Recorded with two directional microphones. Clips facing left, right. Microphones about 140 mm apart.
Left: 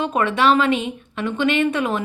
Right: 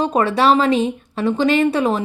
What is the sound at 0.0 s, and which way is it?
Speech, 35° right (ahead or behind).